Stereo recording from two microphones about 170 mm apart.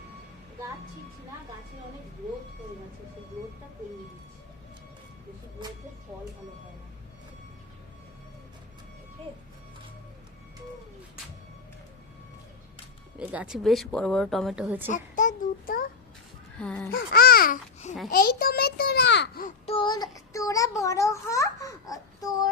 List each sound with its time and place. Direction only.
13.1 s speech: 5° right (ahead or behind)
14.9 s child singing: 50° left (ahead or behind)
16.6 s speech: 5° left (ahead or behind)
16.9 s a child's voice: 65° left (ahead or behind)
19.6 s a child's voice: 30° left (ahead or behind)